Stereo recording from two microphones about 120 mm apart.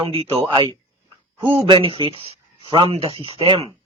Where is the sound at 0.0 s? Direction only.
45° right (ahead or behind).